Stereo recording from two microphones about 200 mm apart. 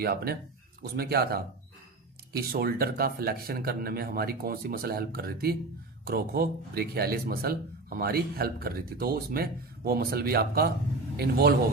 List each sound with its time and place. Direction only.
0.0 s speech: 50° right (ahead or behind)